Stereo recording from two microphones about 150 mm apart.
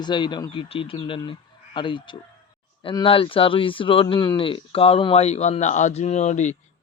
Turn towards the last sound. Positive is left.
turn(degrees=50)  # may be behind; listen again after turning